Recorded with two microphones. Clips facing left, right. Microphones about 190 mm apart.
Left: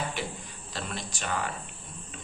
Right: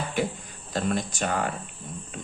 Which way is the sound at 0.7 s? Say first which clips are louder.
Right 10 dB; 50° right (ahead or behind).